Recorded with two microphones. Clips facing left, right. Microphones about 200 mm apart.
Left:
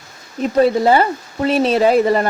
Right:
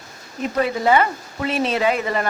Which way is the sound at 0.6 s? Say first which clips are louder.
Left 5 dB; 35° left (ahead or behind).